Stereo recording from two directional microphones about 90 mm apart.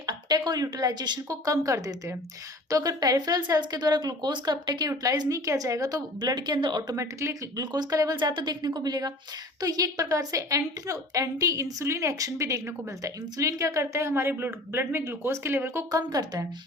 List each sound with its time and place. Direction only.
0.0 s a woman's voice: 55° right (ahead or behind); by 6.0 s 40° right (ahead or behind)
6.2 s speech: 50° right (ahead or behind)
6.9 s a woman's voice: 35° right (ahead or behind)
7.6 s a woman's voice: 50° right (ahead or behind); by 14.1 s 35° right (ahead or behind)
14.1 s speech: 25° right (ahead or behind)
15.9 s speech: 45° right (ahead or behind)